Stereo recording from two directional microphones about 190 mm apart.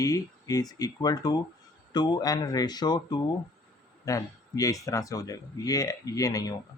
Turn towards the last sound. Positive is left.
turn(degrees=15)  # may be behind; listen again after turning